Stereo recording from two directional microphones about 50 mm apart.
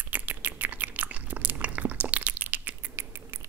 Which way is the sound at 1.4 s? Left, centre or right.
Right.